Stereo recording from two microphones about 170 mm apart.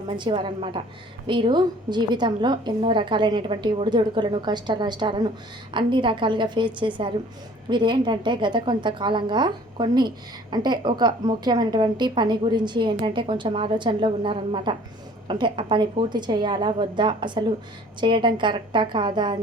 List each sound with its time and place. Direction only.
0.2 s a woman's voice: 30° right (ahead or behind)